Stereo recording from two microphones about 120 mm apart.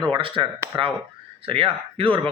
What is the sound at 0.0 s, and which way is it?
Speech, 45° right (ahead or behind).